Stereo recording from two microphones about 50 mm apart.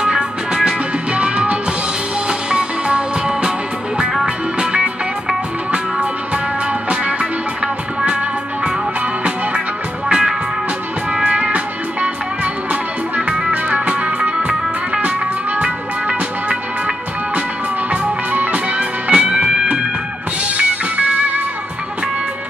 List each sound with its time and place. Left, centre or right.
0.0 s music: centre
5.7 s music: right
10.0 s music: centre
11.2 s music: right
13.5 s music: right
18.3 s music: right